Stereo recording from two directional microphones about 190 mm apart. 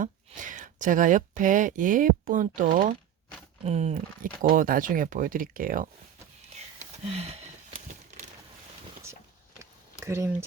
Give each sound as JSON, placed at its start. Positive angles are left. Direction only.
{"t": 0.0, "sound": "speech", "side_deg": -45}
{"t": 6.7, "sound": "a sound", "side_deg": -35}
{"t": 10.0, "sound": "speech", "side_deg": -15}